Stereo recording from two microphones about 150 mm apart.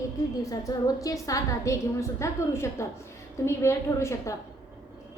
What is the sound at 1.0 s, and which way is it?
A woman's voice, 20° left (ahead or behind).